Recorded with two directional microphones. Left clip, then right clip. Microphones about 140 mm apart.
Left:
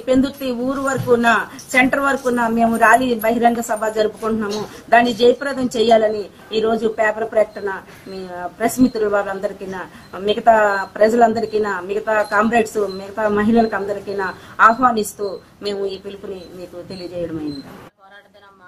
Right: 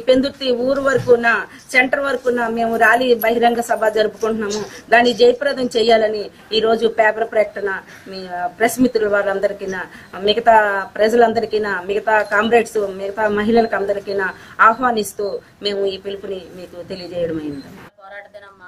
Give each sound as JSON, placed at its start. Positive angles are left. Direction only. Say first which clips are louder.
{"t": 0.2, "sound": "a woman's voice", "louder": "right 3 dB", "side_deg": -20}